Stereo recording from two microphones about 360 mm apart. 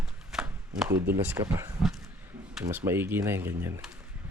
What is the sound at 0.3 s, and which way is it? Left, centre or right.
Speech, centre.